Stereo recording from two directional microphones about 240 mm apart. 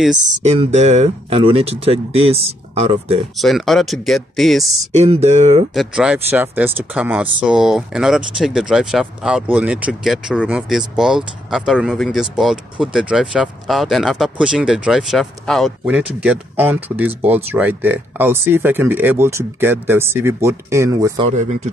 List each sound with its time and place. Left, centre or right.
0.3 s speech: right
3.3 s speech: centre
4.9 s speech: right
5.8 s speech: centre
21.3 s speech: right